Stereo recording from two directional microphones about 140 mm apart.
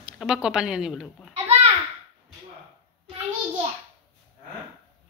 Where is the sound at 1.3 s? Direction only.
45° right (ahead or behind).